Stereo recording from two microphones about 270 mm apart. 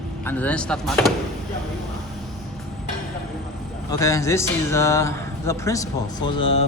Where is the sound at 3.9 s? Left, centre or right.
Centre.